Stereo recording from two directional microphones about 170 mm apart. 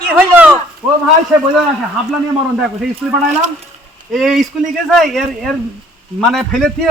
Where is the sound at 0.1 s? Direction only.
10° right (ahead or behind).